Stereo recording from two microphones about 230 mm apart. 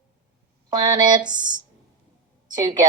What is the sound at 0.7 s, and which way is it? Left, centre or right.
Speech, centre.